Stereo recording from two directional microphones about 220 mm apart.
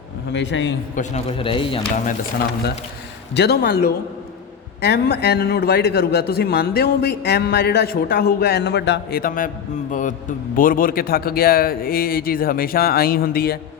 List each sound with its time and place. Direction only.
0.3 s a man's voice: 55° left (ahead or behind)
0.9 s speech: 30° left (ahead or behind)
3.3 s a man's voice: 45° left (ahead or behind)